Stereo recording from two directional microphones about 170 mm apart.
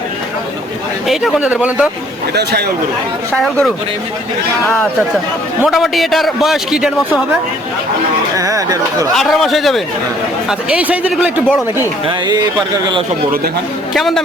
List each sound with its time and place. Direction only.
1.0 s a man's voice: centre (ahead or behind)
2.3 s a man's voice: 75° right (ahead or behind)
3.3 s a man's voice: 5° left (ahead or behind)
5.6 s a man's voice: centre (ahead or behind)
8.4 s speech: 20° right (ahead or behind)
9.1 s a man's voice: centre (ahead or behind)
12.0 s speech: 25° right (ahead or behind)
13.9 s a man's voice: centre (ahead or behind)